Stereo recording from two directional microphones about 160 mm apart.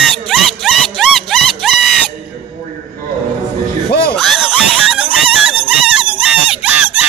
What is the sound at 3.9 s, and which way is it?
Music, 75° left (ahead or behind).